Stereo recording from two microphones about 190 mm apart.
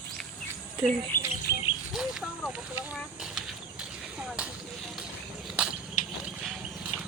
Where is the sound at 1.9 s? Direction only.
Centre (ahead or behind).